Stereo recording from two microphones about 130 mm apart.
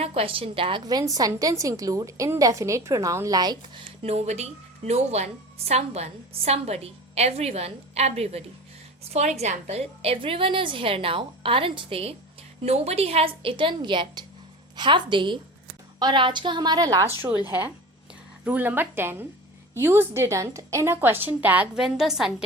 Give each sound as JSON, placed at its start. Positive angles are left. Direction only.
{"t": 0.0, "sound": "a woman's voice", "side_deg": -45}
{"t": 0.9, "sound": "a woman's voice", "side_deg": -30}
{"t": 4.0, "sound": "a woman's voice", "side_deg": -55}